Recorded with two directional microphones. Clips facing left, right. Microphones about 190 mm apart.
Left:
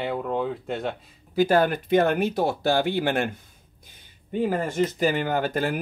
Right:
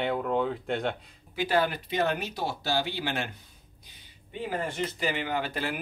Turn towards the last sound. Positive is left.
turn(degrees=45)  # may be behind; listen again after turning